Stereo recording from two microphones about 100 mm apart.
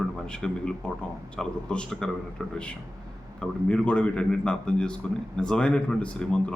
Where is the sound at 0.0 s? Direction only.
10° left (ahead or behind).